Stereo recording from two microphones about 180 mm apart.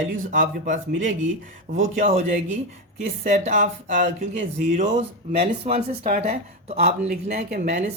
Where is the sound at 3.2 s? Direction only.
40° right (ahead or behind).